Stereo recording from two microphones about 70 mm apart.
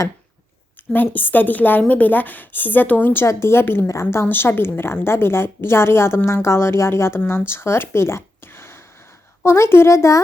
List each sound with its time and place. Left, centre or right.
0.9 s a woman's voice: left